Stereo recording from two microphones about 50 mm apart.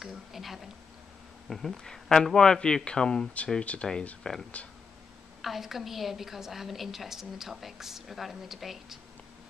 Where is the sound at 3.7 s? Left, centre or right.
Left.